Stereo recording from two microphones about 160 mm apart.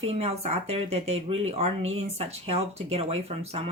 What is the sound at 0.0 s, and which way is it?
Speech, 40° right (ahead or behind).